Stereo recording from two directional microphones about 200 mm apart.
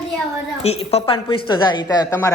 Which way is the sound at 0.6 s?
30° left (ahead or behind).